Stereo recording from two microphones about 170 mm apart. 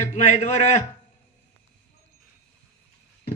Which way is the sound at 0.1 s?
45° left (ahead or behind).